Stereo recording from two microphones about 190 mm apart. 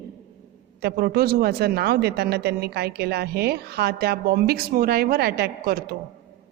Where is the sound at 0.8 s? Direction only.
55° right (ahead or behind).